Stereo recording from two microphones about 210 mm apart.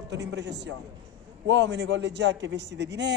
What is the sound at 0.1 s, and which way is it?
A man's voice, 55° right (ahead or behind).